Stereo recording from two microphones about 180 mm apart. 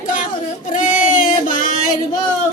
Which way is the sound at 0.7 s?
45° left (ahead or behind).